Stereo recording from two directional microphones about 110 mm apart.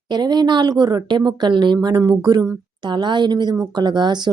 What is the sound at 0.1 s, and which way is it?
A woman's voice, 40° right (ahead or behind).